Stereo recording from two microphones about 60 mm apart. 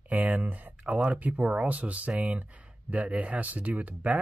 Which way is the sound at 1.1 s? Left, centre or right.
Right.